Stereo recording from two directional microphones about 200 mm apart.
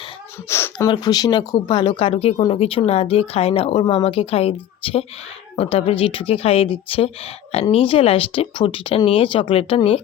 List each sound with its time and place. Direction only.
0.4 s speech: 10° left (ahead or behind); by 10.0 s 30° left (ahead or behind)